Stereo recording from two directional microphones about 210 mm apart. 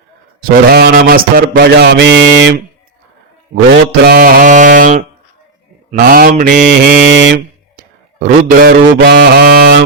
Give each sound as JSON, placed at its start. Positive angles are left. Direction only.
{"t": 0.4, "sound": "mantra", "side_deg": -45}
{"t": 3.5, "sound": "speech", "side_deg": -55}
{"t": 5.9, "sound": "mantra", "side_deg": -40}
{"t": 8.2, "sound": "mantra", "side_deg": -45}